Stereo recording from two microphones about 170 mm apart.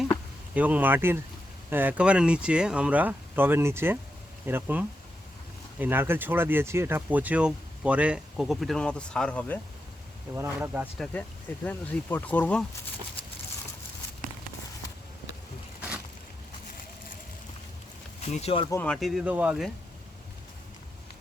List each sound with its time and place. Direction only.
0.5 s speech: 10° right (ahead or behind); by 9.6 s 10° left (ahead or behind)
10.3 s speech: 15° right (ahead or behind)
10.9 s speech: 5° left (ahead or behind)
18.3 s speech: 40° left (ahead or behind)
18.7 s speech: 10° left (ahead or behind)
18.9 s speech: centre (ahead or behind)